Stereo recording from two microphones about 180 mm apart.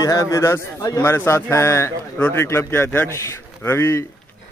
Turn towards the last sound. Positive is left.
turn(degrees=15)  # may be behind; listen again after turning